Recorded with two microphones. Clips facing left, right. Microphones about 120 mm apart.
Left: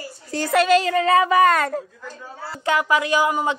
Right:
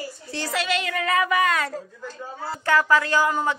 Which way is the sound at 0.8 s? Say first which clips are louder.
Left 6 dB; 30° left (ahead or behind).